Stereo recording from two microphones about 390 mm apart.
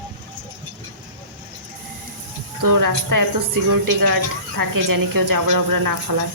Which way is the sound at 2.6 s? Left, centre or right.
Right.